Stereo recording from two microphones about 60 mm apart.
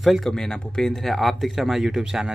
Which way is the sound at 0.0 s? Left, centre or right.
Centre.